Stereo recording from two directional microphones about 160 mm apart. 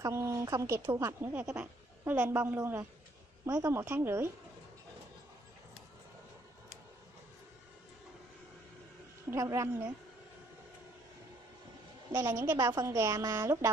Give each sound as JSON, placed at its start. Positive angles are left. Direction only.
{"t": 0.0, "sound": "a woman's voice", "side_deg": -15}
{"t": 9.3, "sound": "a woman's voice", "side_deg": -20}
{"t": 12.1, "sound": "a woman's voice", "side_deg": -15}